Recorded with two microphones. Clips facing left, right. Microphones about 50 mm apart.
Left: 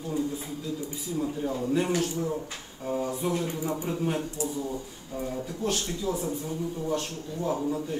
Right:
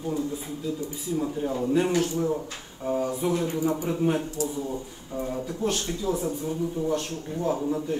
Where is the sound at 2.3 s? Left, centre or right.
Centre.